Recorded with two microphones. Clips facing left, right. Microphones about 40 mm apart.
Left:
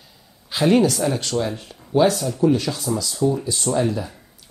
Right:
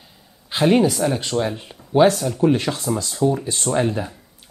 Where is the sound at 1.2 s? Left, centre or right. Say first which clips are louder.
Right 1 dB; right.